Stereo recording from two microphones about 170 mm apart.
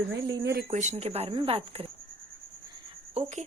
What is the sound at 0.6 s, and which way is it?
Speech, 45° right (ahead or behind).